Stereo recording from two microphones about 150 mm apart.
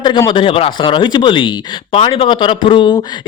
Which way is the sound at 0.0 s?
30° left (ahead or behind).